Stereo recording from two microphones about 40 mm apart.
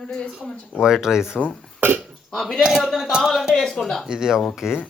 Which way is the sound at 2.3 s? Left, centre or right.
Centre.